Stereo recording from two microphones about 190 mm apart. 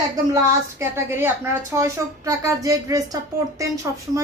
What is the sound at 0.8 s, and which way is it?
A woman's voice, 15° right (ahead or behind).